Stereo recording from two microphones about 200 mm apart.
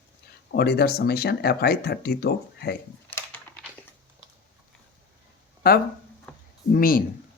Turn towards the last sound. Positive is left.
turn(degrees=45)  # may be behind; listen again after turning